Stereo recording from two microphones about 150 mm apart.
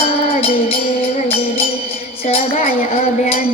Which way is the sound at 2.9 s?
45° left (ahead or behind).